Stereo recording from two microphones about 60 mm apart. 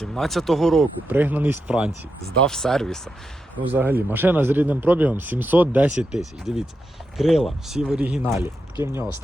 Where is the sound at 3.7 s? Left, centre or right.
Right.